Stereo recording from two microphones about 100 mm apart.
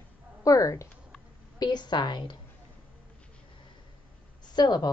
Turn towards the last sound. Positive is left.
turn(degrees=45)  # may be behind; listen again after turning